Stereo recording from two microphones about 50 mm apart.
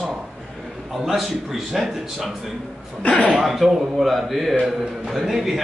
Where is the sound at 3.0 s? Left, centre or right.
Left.